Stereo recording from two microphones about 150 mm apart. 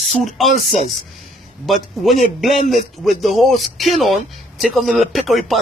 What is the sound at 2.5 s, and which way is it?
Speech, 50° left (ahead or behind).